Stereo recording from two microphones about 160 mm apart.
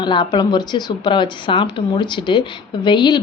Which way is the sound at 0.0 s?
30° left (ahead or behind).